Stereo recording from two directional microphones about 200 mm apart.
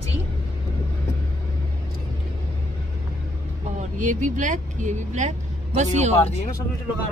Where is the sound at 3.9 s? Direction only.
40° right (ahead or behind).